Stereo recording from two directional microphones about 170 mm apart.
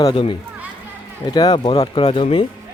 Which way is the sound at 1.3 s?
25° left (ahead or behind).